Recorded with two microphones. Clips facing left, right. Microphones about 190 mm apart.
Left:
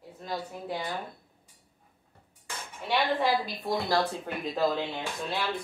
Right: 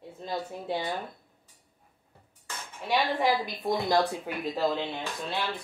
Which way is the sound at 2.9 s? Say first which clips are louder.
Even; 15° right (ahead or behind).